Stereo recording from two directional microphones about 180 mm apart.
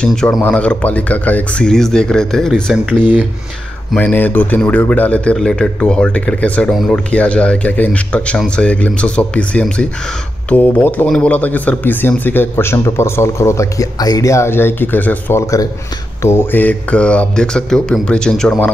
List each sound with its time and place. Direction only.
0.0 s speech: 5° left (ahead or behind)
3.9 s a man's voice: 10° left (ahead or behind)